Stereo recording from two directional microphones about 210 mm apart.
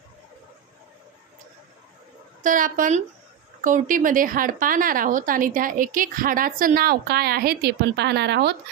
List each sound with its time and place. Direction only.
2.4 s a woman's voice: 40° right (ahead or behind)